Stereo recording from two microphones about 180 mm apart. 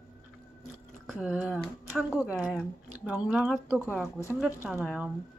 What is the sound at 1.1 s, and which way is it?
Speech, 5° right (ahead or behind).